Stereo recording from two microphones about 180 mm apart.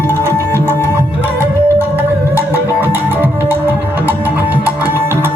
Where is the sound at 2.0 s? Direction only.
10° right (ahead or behind).